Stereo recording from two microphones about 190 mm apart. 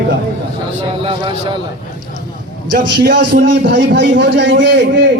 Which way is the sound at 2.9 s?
65° right (ahead or behind).